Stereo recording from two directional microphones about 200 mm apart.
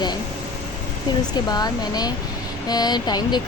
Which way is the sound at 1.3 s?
20° left (ahead or behind).